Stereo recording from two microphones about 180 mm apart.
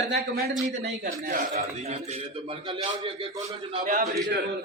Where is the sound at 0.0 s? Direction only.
60° right (ahead or behind).